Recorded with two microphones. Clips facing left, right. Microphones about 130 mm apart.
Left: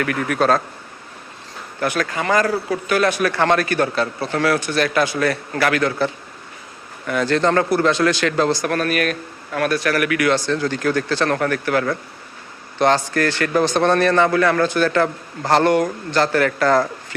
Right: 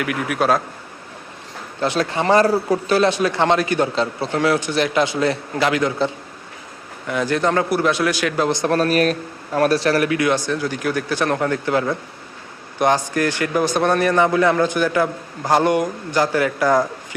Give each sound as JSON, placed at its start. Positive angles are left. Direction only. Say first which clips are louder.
{"t": 0.0, "sound": "a man's voice", "louder": "left 1 dB", "side_deg": -10}
{"t": 1.8, "sound": "speech", "louder": "right 2 dB", "side_deg": -25}
{"t": 7.1, "sound": "a man's voice", "louder": "left 2 dB", "side_deg": -15}
{"t": 8.5, "sound": "a man's voice", "louder": "right 3 dB", "side_deg": -30}